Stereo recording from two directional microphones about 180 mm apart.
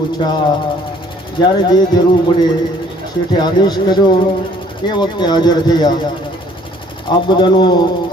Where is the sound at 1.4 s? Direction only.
25° left (ahead or behind).